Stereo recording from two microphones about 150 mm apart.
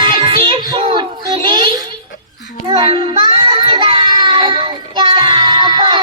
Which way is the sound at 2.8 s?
35° right (ahead or behind).